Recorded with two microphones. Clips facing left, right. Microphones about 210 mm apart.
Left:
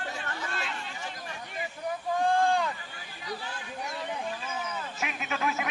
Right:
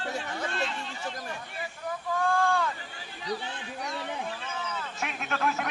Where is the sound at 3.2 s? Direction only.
25° right (ahead or behind).